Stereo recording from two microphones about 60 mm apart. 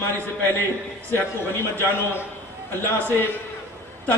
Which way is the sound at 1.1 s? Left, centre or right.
Left.